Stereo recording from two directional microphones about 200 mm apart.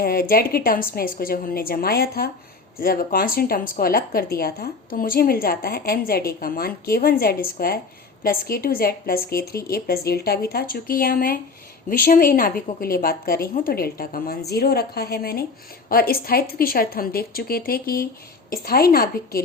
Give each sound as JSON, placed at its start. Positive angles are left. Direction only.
{"t": 0.0, "sound": "speech", "side_deg": 45}